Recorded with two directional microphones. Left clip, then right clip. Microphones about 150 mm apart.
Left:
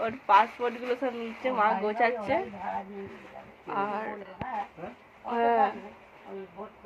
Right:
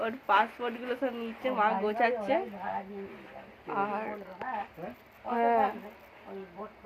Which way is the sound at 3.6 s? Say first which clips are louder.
Left 1 dB; 10° right (ahead or behind).